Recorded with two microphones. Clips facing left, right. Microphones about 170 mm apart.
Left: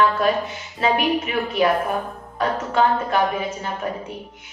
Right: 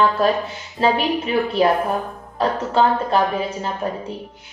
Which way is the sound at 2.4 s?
30° right (ahead or behind).